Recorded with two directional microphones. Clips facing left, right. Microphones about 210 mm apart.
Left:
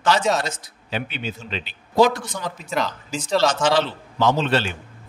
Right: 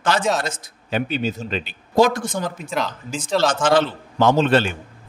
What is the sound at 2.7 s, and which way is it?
Speech, centre (ahead or behind).